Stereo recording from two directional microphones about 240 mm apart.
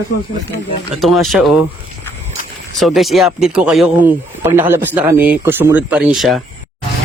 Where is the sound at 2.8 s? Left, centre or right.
Centre.